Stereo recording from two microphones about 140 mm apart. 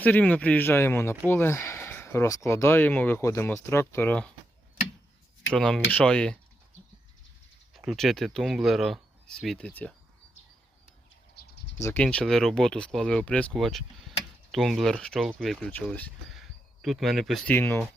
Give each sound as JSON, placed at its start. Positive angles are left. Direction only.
{"t": 0.0, "sound": "speech", "side_deg": 10}
{"t": 5.5, "sound": "speech", "side_deg": 5}
{"t": 7.9, "sound": "speech", "side_deg": 0}
{"t": 11.8, "sound": "speech", "side_deg": 15}
{"t": 17.5, "sound": "speech", "side_deg": 15}